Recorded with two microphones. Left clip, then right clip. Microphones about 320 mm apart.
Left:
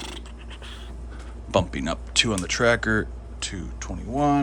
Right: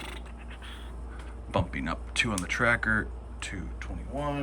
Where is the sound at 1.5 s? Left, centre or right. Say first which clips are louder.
Left 7 dB; centre.